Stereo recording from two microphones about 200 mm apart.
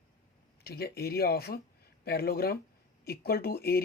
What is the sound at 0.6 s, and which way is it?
Speech, 50° left (ahead or behind).